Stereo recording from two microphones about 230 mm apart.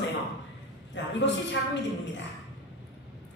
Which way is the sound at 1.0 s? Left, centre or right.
Left.